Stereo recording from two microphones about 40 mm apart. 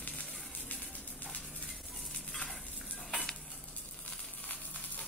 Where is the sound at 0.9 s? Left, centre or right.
Left.